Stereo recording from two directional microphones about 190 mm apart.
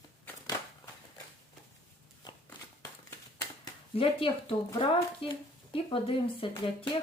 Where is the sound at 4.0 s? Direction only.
30° left (ahead or behind).